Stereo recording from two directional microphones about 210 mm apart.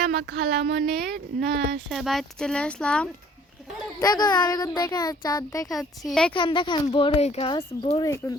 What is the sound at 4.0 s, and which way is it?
Speech, 20° left (ahead or behind).